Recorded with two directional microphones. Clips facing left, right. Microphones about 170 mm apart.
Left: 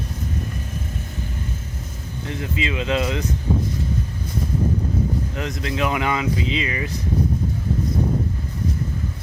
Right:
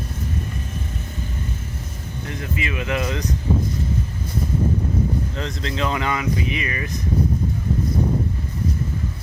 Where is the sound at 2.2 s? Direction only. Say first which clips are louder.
Left 2 dB; 20° left (ahead or behind).